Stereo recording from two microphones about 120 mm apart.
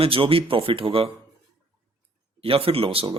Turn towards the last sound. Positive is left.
turn(degrees=-50)  # may be behind; listen again after turning